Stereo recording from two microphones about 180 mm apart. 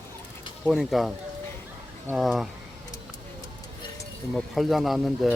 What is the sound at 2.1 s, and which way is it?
Speech, centre (ahead or behind).